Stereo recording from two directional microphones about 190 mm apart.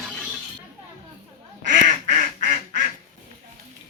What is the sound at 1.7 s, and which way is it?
Quack, 40° right (ahead or behind).